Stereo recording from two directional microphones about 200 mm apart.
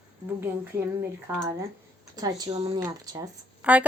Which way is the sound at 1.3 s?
15° right (ahead or behind).